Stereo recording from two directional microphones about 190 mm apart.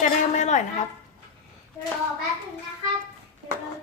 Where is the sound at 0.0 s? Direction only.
40° left (ahead or behind).